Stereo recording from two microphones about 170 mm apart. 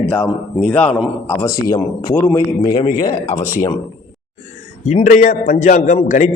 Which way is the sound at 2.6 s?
30° left (ahead or behind).